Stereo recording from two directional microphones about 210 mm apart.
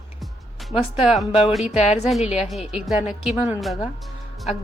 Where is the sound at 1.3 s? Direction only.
30° left (ahead or behind).